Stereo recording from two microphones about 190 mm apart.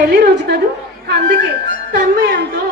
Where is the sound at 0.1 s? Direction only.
60° right (ahead or behind).